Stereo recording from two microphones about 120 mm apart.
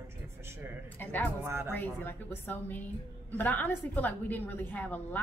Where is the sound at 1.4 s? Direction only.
20° right (ahead or behind).